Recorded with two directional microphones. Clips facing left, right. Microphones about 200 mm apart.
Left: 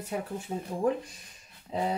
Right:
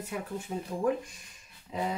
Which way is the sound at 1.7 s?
35° left (ahead or behind).